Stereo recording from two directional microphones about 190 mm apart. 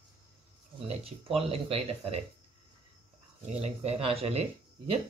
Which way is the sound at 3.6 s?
35° right (ahead or behind).